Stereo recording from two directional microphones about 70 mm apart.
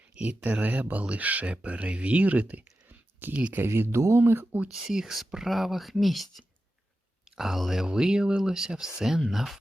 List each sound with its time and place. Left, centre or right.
0.3 s speech: right
3.6 s speech: right
4.9 s speech: centre
7.3 s speech: centre